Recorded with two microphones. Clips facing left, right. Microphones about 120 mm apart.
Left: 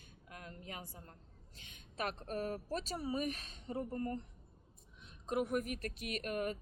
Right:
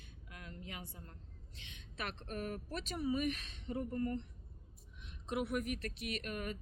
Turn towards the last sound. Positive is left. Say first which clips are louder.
# left 3 dB
turn(degrees=40)  # may be behind; listen again after turning